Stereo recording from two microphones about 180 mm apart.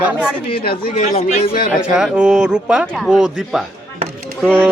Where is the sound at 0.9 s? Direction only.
35° left (ahead or behind).